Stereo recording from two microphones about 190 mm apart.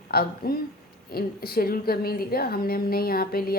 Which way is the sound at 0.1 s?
55° left (ahead or behind).